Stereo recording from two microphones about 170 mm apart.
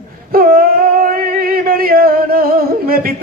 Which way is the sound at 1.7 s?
60° right (ahead or behind).